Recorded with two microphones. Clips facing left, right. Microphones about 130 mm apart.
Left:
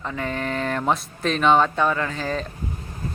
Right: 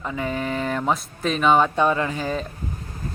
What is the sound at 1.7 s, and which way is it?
Speech, 20° right (ahead or behind).